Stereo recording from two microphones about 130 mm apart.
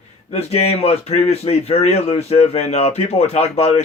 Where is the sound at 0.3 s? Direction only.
50° left (ahead or behind).